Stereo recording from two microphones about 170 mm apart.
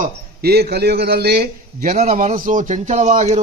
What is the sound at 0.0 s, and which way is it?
A man's voice, 70° right (ahead or behind).